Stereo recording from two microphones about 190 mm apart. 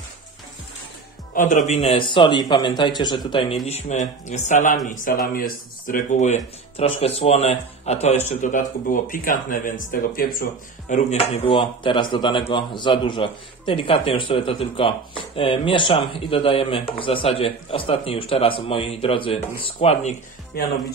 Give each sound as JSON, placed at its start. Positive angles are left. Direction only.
{"t": 1.3, "sound": "a man's voice", "side_deg": 45}
{"t": 1.7, "sound": "speech", "side_deg": 30}
{"t": 20.5, "sound": "speech", "side_deg": 50}